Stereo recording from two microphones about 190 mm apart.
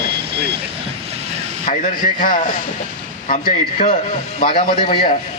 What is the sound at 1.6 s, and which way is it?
A man's voice, 45° left (ahead or behind).